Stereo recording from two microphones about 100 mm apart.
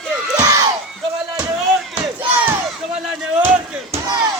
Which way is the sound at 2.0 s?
20° right (ahead or behind).